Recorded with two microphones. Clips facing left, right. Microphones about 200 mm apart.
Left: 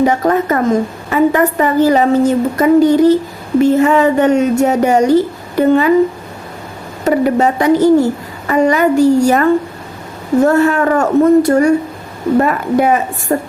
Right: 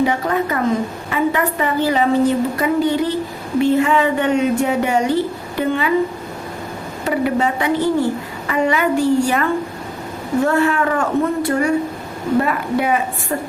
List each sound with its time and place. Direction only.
0.0 s a woman's voice: 45° left (ahead or behind)
7.0 s a woman's voice: 45° left (ahead or behind)